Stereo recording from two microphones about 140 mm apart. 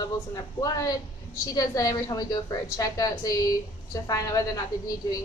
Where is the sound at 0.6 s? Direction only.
35° left (ahead or behind).